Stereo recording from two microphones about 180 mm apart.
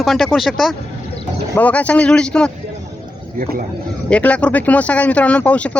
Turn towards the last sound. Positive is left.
turn(degrees=5)  # may be behind; listen again after turning